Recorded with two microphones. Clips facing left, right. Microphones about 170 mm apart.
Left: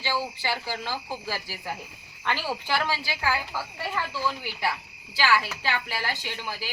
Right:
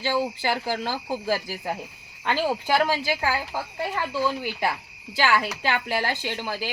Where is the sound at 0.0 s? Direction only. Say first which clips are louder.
Right 5 dB; 45° right (ahead or behind).